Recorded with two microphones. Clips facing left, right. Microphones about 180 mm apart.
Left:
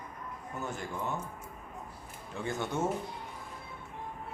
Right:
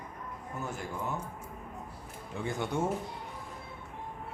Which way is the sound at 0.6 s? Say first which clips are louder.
Even; 5° right (ahead or behind).